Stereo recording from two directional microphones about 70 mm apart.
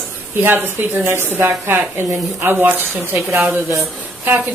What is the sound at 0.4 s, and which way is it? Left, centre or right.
A woman's voice, right.